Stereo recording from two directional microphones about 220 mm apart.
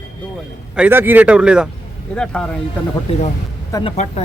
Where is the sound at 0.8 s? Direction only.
10° right (ahead or behind).